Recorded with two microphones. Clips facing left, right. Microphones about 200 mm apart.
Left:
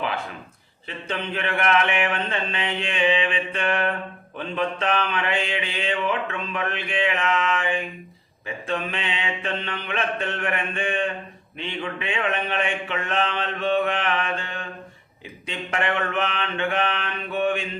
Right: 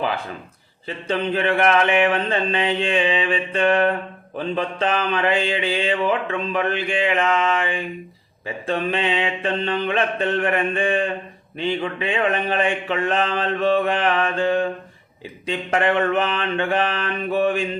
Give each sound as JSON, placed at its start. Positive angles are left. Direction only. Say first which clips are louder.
{"t": 1.0, "sound": "mantra", "louder": "right 7 dB", "side_deg": -35}
{"t": 8.6, "sound": "mantra", "louder": "right 6 dB", "side_deg": -35}